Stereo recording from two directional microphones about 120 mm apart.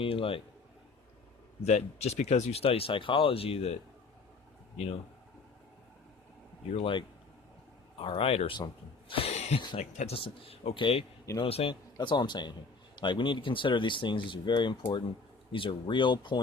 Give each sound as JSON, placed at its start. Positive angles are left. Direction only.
{"t": 0.0, "sound": "speech", "side_deg": 50}
{"t": 1.6, "sound": "speech", "side_deg": 65}
{"t": 6.7, "sound": "speech", "side_deg": 50}
{"t": 8.5, "sound": "speech", "side_deg": 40}
{"t": 11.7, "sound": "speech", "side_deg": 40}